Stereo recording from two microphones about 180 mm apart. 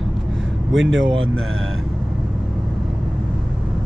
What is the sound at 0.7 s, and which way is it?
Speech, 90° right.